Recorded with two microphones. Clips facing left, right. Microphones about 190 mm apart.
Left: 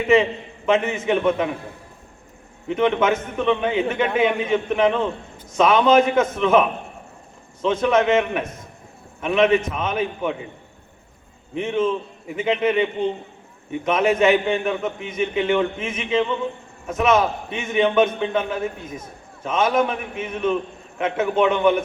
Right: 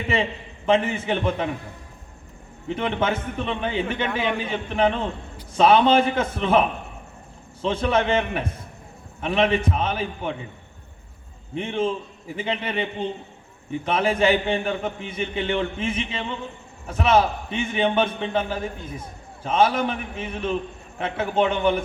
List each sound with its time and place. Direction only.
0.1 s a man's voice: 30° right (ahead or behind)
2.6 s a man's voice: 35° right (ahead or behind)
11.5 s a man's voice: 30° right (ahead or behind)